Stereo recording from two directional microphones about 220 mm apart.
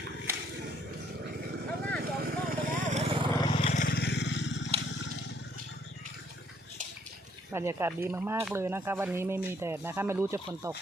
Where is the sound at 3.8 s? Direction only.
45° left (ahead or behind).